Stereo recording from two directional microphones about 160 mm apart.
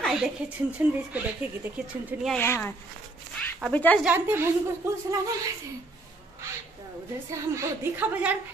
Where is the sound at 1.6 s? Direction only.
5° right (ahead or behind).